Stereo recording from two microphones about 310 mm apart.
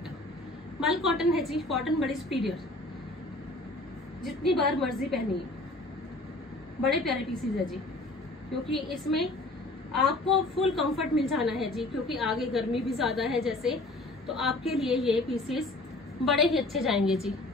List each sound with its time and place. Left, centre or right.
0.7 s a woman's voice: centre
4.2 s a woman's voice: centre
6.8 s a woman's voice: centre
8.7 s a woman's voice: centre